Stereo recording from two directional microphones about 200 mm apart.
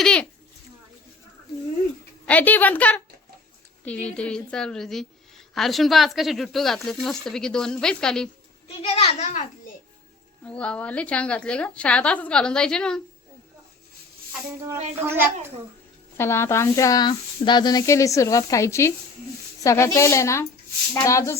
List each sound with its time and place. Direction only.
0.0 s a sound: 5° left (ahead or behind)
2.2 s speech: 10° left (ahead or behind)
8.6 s a child's voice: 30° left (ahead or behind)
10.4 s speech: 5° left (ahead or behind)
16.1 s speech: 10° left (ahead or behind)